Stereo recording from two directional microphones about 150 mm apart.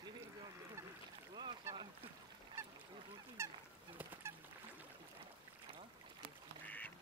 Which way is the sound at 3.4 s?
20° right (ahead or behind).